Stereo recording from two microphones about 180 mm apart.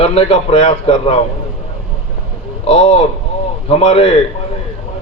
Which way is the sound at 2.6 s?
35° left (ahead or behind).